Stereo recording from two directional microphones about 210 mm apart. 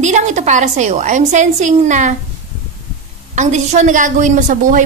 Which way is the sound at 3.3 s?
35° right (ahead or behind).